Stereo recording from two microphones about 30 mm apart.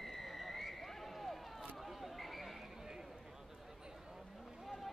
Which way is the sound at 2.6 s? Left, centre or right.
Centre.